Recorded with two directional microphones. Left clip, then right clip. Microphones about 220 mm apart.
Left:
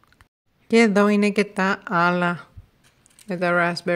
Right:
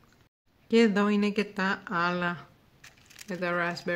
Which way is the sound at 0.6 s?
35° left (ahead or behind).